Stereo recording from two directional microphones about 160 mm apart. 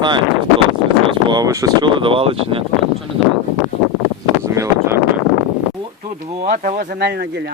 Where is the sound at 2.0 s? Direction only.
35° right (ahead or behind).